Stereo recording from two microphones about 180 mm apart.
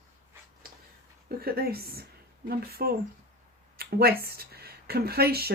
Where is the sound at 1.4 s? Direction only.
55° right (ahead or behind).